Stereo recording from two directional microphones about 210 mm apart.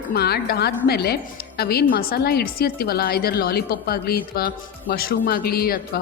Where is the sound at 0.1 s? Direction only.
50° left (ahead or behind).